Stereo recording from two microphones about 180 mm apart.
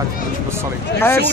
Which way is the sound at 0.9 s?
15° left (ahead or behind).